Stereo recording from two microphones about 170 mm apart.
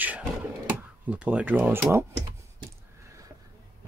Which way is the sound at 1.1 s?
5° right (ahead or behind).